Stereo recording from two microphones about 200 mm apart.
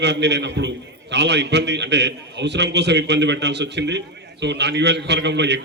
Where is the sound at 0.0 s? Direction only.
60° right (ahead or behind).